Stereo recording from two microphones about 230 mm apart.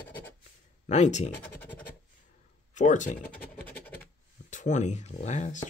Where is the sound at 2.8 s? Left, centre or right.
Left.